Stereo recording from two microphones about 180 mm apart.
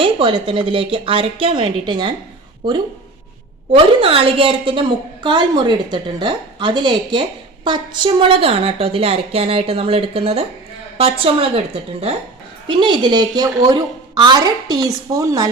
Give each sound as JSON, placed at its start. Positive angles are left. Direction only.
{"t": 0.0, "sound": "a woman's voice", "side_deg": -30}
{"t": 3.7, "sound": "a woman's voice", "side_deg": -30}